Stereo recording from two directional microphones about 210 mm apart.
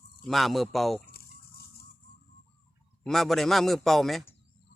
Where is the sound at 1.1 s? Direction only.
45° left (ahead or behind).